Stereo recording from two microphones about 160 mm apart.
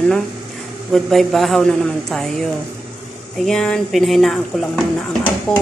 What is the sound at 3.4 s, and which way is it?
Speech, 5° left (ahead or behind).